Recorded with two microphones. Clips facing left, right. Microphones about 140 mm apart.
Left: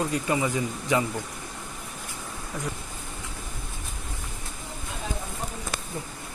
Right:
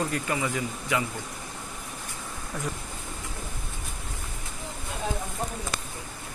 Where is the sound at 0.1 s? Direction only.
20° left (ahead or behind).